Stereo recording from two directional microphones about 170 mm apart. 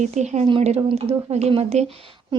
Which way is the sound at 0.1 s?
40° right (ahead or behind).